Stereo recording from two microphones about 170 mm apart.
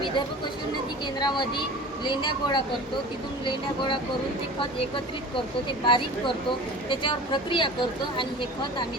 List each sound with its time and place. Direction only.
1.2 s speech: 25° left (ahead or behind)
5.8 s speech: 30° left (ahead or behind)